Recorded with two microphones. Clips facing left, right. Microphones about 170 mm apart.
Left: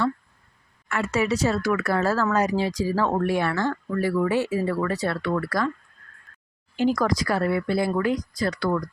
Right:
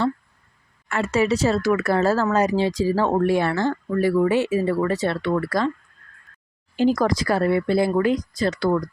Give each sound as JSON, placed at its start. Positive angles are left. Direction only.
{"t": 0.9, "sound": "speech", "side_deg": -30}
{"t": 6.7, "sound": "speech", "side_deg": -30}